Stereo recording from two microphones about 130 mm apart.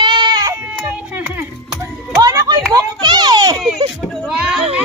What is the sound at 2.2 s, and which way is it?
Children playing, 25° right (ahead or behind).